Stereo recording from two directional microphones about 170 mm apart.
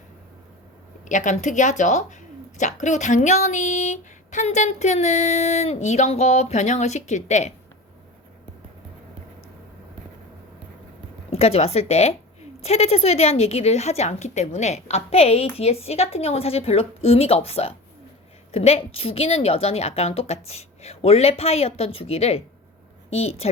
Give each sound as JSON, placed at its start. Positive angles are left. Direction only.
{"t": 1.0, "sound": "speech", "side_deg": 45}
{"t": 11.3, "sound": "speech", "side_deg": 35}